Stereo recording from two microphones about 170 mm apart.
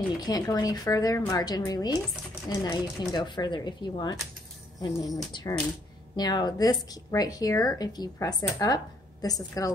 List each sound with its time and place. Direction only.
0.2 s speech: 20° left (ahead or behind)